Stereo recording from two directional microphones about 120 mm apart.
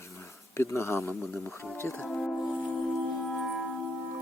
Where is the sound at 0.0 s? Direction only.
25° left (ahead or behind).